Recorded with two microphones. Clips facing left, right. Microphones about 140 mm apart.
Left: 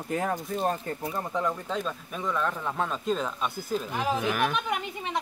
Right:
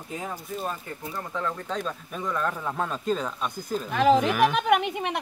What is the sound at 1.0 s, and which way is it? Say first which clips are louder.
Speech: right 1 dB; 20° left (ahead or behind).